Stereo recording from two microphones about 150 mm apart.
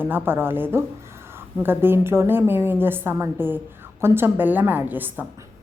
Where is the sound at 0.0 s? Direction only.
15° right (ahead or behind).